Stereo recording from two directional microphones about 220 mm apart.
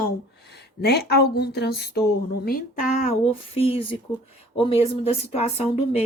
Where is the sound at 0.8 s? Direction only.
45° left (ahead or behind).